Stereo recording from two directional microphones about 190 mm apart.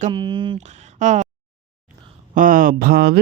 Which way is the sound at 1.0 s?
40° right (ahead or behind).